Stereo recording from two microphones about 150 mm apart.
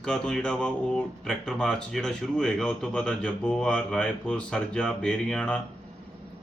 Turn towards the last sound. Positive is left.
turn(degrees=5)  # may be behind; listen again after turning